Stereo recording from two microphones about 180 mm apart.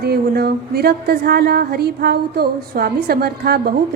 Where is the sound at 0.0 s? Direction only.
60° right (ahead or behind).